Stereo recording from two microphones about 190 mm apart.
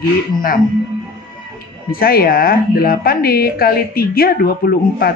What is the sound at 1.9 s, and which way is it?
Speech, 50° left (ahead or behind).